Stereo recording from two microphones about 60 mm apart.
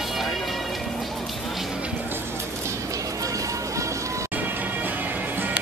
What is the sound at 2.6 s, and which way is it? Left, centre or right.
Music, right.